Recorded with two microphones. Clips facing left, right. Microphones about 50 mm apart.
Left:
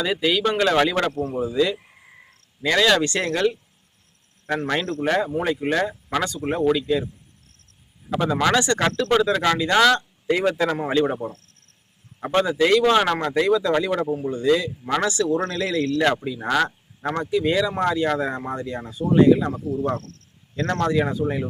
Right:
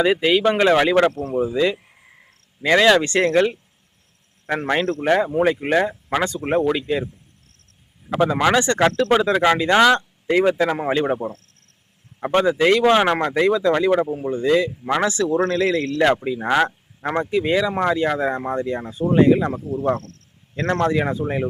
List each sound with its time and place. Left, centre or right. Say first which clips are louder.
0.0 s speech: right 5 dB; right
8.1 s speech: right 3 dB; centre
13.9 s speech: right 4 dB; centre; by 21.4 s right